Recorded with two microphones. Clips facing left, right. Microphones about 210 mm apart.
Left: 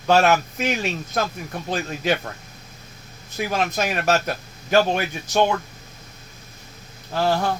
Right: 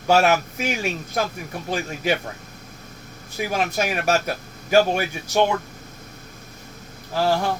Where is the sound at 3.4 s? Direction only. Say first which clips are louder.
Even; 10° right (ahead or behind).